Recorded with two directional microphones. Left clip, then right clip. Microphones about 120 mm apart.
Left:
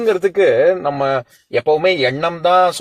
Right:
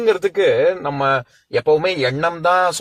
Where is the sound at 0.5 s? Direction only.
25° left (ahead or behind).